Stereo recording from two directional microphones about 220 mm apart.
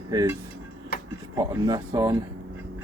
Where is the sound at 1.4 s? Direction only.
15° right (ahead or behind).